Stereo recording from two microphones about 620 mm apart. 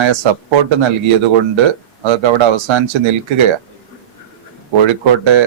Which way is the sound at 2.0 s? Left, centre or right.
Right.